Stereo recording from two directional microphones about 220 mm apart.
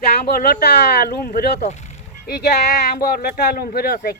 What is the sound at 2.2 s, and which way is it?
Speech, 45° left (ahead or behind).